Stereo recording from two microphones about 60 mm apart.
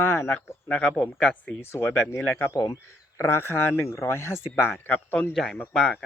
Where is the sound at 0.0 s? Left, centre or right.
Left.